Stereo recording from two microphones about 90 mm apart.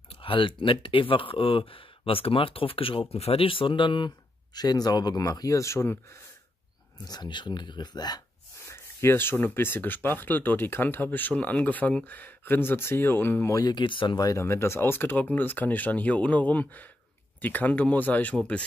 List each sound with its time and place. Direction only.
0.1 s speech: 80° left; by 4.1 s 65° left (ahead or behind)
4.6 s speech: 50° left (ahead or behind); by 6.1 s 30° left (ahead or behind)
7.1 s speech: 55° left (ahead or behind)
8.6 s speech: 30° left (ahead or behind)
13.6 s speech: 50° left (ahead or behind)
14.1 s speech: 40° left (ahead or behind)
14.4 s speech: 30° left (ahead or behind); by 18.7 s 15° left (ahead or behind)